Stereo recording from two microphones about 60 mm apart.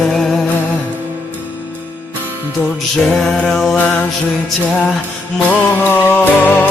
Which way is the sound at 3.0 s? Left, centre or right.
Centre.